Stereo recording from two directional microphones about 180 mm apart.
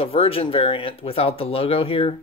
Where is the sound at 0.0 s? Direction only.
30° left (ahead or behind).